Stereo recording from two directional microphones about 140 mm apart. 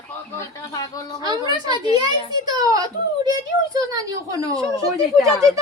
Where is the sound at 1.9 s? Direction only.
30° right (ahead or behind).